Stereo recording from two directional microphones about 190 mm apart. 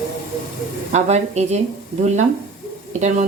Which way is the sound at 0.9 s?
35° right (ahead or behind).